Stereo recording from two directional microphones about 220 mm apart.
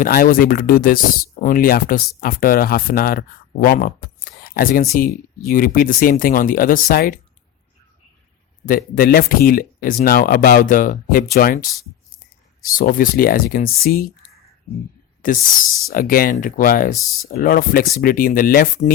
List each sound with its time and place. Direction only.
0.0 s speech: 40° left (ahead or behind)
8.6 s speech: 40° left (ahead or behind)
12.7 s speech: 40° left (ahead or behind)
15.5 s speech: 40° left (ahead or behind)